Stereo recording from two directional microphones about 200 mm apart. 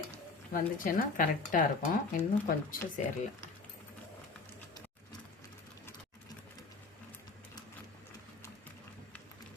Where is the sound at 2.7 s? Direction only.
45° left (ahead or behind).